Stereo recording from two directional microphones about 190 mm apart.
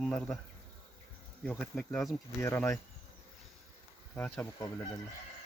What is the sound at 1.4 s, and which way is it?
Speech, 5° left (ahead or behind).